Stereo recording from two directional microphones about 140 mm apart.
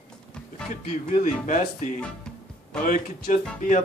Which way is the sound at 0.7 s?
65° left (ahead or behind).